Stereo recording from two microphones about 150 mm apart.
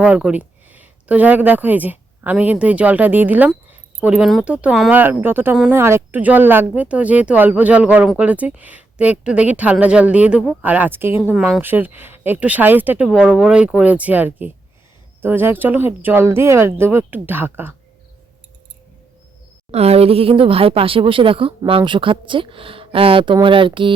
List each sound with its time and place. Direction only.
0.0 s speech: 5° right (ahead or behind)
19.7 s speech: 45° right (ahead or behind)